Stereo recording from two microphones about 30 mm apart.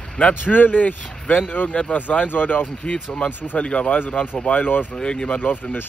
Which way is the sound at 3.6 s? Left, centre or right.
Left.